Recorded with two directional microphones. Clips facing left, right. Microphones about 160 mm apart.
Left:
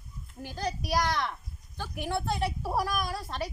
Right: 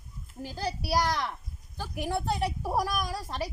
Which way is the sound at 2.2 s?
40° right (ahead or behind).